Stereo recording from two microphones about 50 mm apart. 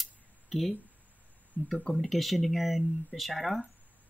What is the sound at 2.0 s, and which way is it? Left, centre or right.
Speech, centre.